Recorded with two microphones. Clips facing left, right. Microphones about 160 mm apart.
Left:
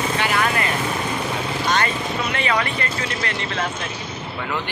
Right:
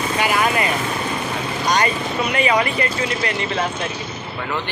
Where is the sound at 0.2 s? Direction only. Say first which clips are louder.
Right 5 dB; 15° right (ahead or behind).